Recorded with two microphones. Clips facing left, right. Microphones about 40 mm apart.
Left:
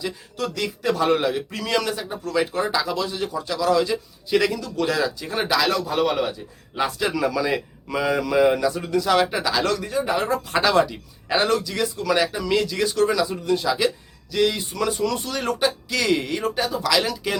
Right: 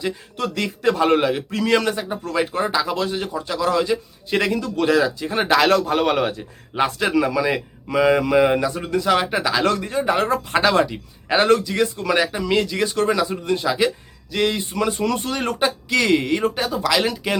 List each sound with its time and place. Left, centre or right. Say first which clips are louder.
0.0 s a man's voice: right 3 dB; right
2.6 s speech: right 2 dB; centre
2.8 s a man's voice: right 2 dB; right
4.9 s a man's voice: right 7 dB; right
5.5 s speech: right 4 dB; right
6.7 s a man's voice: right 3 dB; right
7.2 s a man's voice: right 3 dB; centre
9.0 s a man's voice: right 2 dB; centre
9.6 s a man's voice: right 3 dB; right
10.5 s a man's voice: even; centre
11.3 s a man's voice: right 5 dB; right
11.6 s a man's voice: right 4 dB; right
16.4 s a man's voice: right 2 dB; right